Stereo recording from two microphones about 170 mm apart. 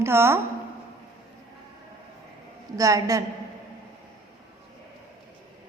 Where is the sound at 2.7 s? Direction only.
20° right (ahead or behind).